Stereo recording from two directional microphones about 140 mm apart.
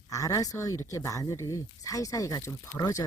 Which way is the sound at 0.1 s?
25° left (ahead or behind).